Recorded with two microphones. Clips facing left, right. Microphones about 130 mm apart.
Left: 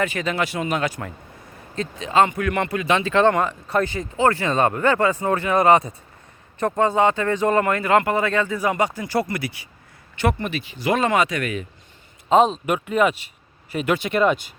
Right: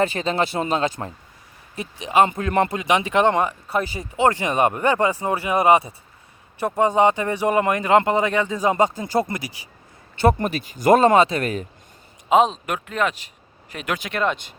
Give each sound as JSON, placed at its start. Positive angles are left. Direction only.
{"t": 0.0, "sound": "speech", "side_deg": -30}
{"t": 1.7, "sound": "speech", "side_deg": -15}
{"t": 2.2, "sound": "speech", "side_deg": -30}
{"t": 2.7, "sound": "speech", "side_deg": -20}
{"t": 10.3, "sound": "speech", "side_deg": -40}
{"t": 12.3, "sound": "speech", "side_deg": 0}